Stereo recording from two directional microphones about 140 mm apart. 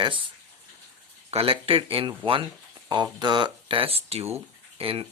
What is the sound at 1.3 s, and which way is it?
Speech, 40° right (ahead or behind).